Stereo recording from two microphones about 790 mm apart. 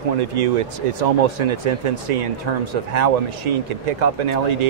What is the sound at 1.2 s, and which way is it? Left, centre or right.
Speech, right.